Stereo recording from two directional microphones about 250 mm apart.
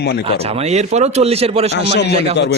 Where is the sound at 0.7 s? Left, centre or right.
Right.